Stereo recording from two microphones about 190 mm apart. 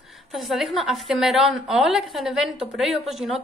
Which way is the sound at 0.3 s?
Centre (ahead or behind).